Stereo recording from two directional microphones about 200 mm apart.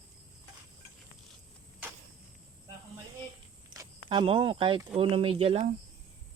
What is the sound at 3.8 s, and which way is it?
Speech, 25° right (ahead or behind).